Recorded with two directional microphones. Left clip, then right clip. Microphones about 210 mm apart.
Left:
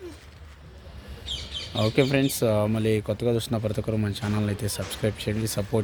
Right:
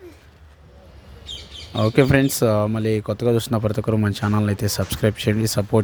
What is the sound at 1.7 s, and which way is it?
Speech, 25° right (ahead or behind).